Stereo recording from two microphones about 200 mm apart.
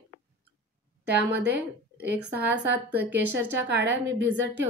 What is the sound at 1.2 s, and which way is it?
Speech, 55° right (ahead or behind).